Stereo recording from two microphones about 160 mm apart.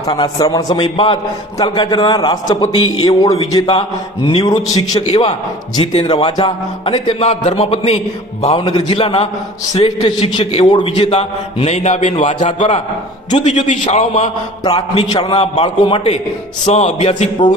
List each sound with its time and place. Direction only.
0.1 s a man's voice: 25° left (ahead or behind); by 12.5 s 45° left (ahead or behind)
12.5 s a man's voice: 30° left (ahead or behind)
13.3 s a man's voice: 45° left (ahead or behind)
14.6 s a man's voice: 35° left (ahead or behind)
15.4 s a man's voice: 40° left (ahead or behind)